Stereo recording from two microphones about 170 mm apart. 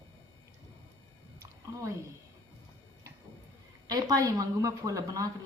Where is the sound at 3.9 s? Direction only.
20° right (ahead or behind).